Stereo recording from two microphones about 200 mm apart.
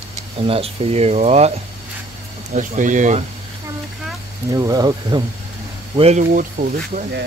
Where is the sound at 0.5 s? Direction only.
30° right (ahead or behind).